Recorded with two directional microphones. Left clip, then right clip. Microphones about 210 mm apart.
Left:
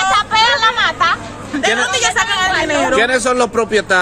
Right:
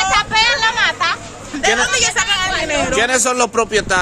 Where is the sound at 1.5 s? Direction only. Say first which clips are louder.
Even; 5° left (ahead or behind).